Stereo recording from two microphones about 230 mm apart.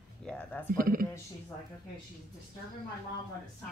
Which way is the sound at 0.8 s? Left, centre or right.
Right.